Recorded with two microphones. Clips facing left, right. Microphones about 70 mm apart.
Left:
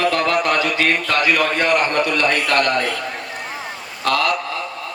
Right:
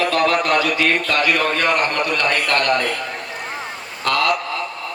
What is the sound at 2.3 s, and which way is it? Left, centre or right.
Speech, right.